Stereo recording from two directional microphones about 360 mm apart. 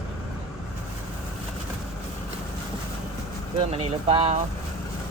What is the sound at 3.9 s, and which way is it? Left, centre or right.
Speech, centre.